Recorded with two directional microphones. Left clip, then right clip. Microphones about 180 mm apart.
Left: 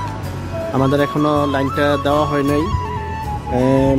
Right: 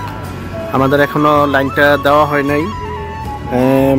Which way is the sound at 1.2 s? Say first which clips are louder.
Right 6 dB; centre (ahead or behind).